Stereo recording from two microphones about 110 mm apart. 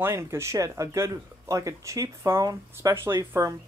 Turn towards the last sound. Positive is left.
turn(degrees=-20)  # may be behind; listen again after turning